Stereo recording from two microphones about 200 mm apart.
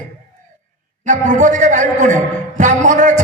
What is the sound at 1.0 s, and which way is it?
A man's voice, 40° right (ahead or behind).